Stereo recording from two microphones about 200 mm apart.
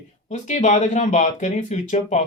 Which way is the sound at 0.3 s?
35° left (ahead or behind).